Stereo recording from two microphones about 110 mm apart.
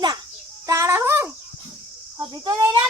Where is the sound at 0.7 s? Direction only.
30° right (ahead or behind).